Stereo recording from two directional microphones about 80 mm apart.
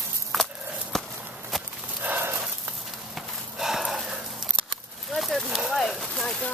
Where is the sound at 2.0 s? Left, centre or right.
Right.